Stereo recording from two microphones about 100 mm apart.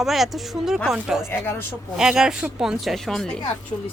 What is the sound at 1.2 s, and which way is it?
Speech, 20° left (ahead or behind).